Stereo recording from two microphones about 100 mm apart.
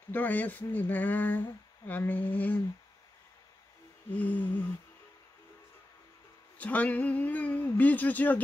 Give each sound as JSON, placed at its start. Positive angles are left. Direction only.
{"t": 0.1, "sound": "speech", "side_deg": 15}
{"t": 4.1, "sound": "speech", "side_deg": 15}
{"t": 6.6, "sound": "speech", "side_deg": 15}